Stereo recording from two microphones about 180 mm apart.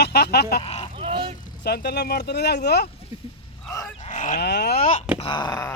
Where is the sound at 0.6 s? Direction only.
35° left (ahead or behind).